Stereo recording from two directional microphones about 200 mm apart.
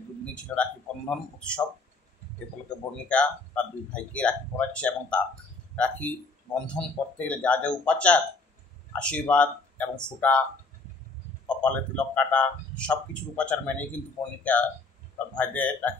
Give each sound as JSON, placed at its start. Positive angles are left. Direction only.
{"t": 0.2, "sound": "a man's voice", "side_deg": 5}
{"t": 3.1, "sound": "a man's voice", "side_deg": 5}
{"t": 11.4, "sound": "a man's voice", "side_deg": 5}